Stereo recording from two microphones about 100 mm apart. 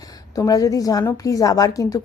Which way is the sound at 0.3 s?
35° left (ahead or behind).